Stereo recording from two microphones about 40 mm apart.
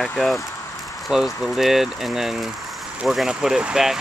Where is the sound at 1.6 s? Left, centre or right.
Centre.